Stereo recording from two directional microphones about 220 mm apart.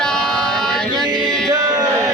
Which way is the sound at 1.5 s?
15° right (ahead or behind).